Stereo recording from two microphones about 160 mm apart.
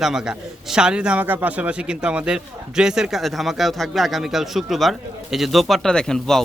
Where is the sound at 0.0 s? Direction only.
5° right (ahead or behind).